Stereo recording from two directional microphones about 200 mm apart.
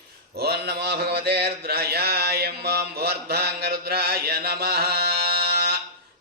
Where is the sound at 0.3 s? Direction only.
50° right (ahead or behind).